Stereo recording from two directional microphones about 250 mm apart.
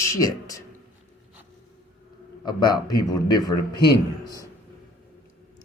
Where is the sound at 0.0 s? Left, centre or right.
Centre.